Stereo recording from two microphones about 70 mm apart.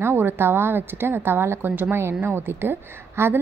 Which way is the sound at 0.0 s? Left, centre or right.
Right.